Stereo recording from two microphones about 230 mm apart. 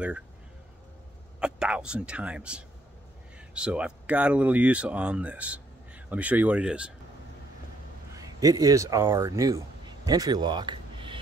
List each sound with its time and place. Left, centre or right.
1.4 s speech: centre
8.2 s speech: centre